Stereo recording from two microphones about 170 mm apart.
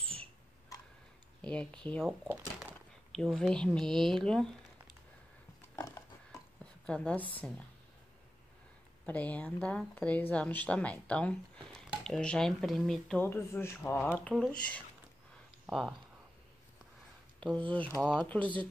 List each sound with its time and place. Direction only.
1.4 s speech: 5° left (ahead or behind)
2.0 s speech: 10° right (ahead or behind)
3.1 s speech: 5° left (ahead or behind)
5.8 s a sound: 20° left (ahead or behind)
6.6 s a sound: 5° left (ahead or behind)
7.3 s speech: 5° left (ahead or behind)
9.0 s speech: 10° left (ahead or behind)
13.2 s speech: 15° left (ahead or behind)
15.6 s a sound: centre (ahead or behind)
17.4 s speech: 5° left (ahead or behind)